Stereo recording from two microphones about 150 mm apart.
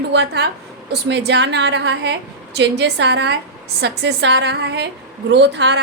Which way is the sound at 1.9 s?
90° right.